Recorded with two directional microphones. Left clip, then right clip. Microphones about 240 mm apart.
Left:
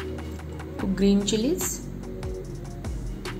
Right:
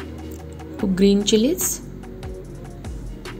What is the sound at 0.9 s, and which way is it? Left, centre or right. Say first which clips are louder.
Speech: right 7 dB; right.